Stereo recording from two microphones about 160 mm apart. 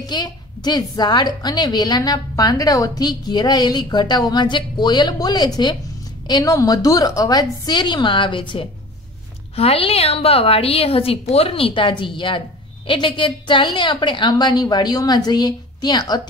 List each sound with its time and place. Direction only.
0.0 s a woman's voice: 25° left (ahead or behind)